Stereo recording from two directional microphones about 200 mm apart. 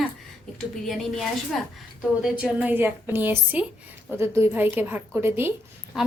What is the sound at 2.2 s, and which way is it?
A woman's voice, 5° right (ahead or behind).